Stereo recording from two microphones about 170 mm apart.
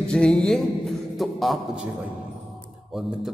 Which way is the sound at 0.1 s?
5° left (ahead or behind).